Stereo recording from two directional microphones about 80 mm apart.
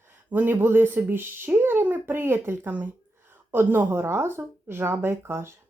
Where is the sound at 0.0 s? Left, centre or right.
Right.